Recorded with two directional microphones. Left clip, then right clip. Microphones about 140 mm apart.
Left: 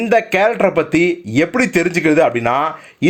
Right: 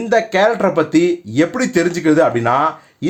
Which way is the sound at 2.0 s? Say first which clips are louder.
Even; 25° left (ahead or behind).